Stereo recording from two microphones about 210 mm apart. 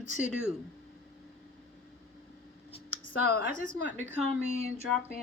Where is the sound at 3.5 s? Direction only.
35° right (ahead or behind).